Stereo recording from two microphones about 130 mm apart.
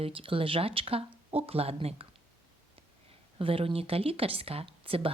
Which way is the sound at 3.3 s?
45° right (ahead or behind).